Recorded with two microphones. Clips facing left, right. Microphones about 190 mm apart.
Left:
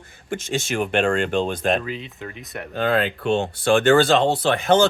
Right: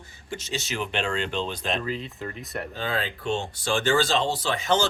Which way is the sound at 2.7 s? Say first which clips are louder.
Left 11 dB; 60° left (ahead or behind).